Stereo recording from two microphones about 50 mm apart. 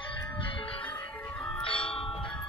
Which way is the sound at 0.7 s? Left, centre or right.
Left.